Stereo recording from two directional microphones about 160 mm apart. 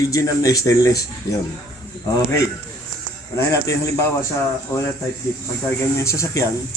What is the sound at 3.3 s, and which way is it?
A man's voice, 20° left (ahead or behind).